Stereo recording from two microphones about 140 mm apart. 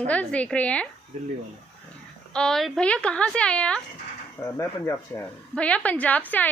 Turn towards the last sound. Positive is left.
turn(degrees=10)  # may be behind; listen again after turning